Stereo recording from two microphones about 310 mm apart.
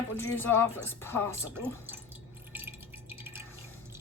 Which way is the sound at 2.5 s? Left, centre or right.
Centre.